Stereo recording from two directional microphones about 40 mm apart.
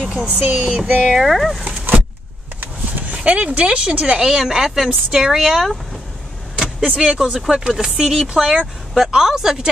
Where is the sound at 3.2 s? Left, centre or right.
Right.